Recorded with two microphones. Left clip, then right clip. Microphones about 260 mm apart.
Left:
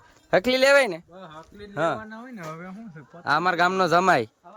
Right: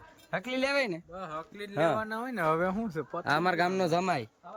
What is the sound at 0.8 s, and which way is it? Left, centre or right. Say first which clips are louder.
Speech: left 8 dB; centre.